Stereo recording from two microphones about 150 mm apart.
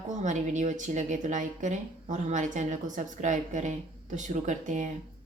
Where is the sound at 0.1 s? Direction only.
55° right (ahead or behind).